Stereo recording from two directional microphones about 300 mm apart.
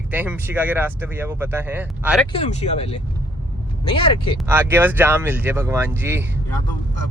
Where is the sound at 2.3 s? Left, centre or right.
Left.